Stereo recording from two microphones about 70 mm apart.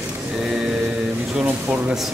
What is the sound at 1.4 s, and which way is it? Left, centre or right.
Speech, centre.